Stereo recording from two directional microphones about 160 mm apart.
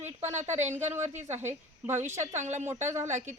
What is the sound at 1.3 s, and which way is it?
Speech, 45° right (ahead or behind).